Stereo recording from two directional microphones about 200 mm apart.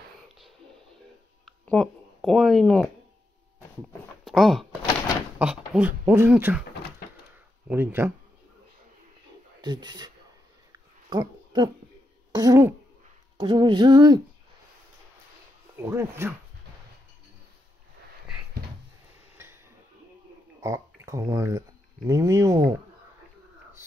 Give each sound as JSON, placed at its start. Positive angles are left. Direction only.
{"t": 1.4, "sound": "a sound", "side_deg": 0}
{"t": 4.2, "sound": "speech", "side_deg": 0}
{"t": 7.6, "sound": "speech", "side_deg": -10}
{"t": 9.6, "sound": "speech", "side_deg": -20}
{"t": 10.7, "sound": "a sound", "side_deg": -20}
{"t": 12.3, "sound": "speech", "side_deg": -20}
{"t": 15.8, "sound": "speech", "side_deg": -15}
{"t": 19.3, "sound": "tick-tock", "side_deg": -10}
{"t": 20.6, "sound": "speech", "side_deg": -15}